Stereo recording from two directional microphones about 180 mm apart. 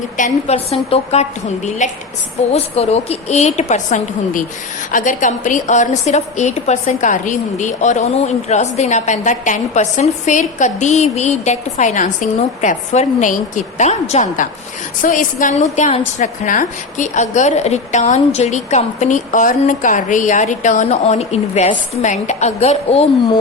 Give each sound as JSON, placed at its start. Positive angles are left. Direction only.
{"t": 0.2, "sound": "a woman's voice", "side_deg": 35}